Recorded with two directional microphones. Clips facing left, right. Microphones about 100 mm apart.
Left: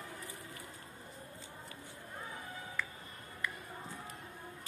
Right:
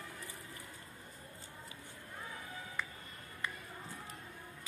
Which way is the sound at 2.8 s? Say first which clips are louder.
Left 1 dB; 20° right (ahead or behind).